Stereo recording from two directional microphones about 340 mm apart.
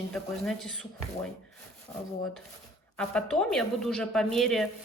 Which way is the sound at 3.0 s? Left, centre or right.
Centre.